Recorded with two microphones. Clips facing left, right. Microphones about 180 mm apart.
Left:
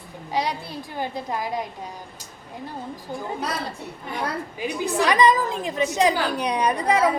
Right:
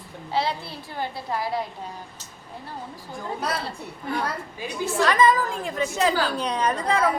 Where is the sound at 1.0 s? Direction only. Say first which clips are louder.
Even; 15° left (ahead or behind).